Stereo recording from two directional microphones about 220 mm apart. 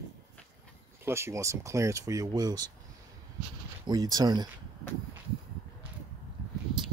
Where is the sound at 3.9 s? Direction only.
15° right (ahead or behind).